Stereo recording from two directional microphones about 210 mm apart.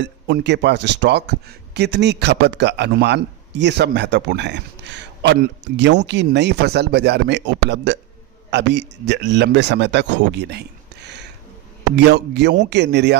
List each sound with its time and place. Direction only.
0.0 s a man's voice: 55° right (ahead or behind)